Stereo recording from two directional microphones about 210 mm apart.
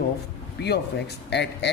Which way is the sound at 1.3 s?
55° left (ahead or behind).